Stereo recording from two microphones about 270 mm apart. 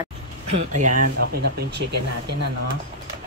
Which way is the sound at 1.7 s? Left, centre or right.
Right.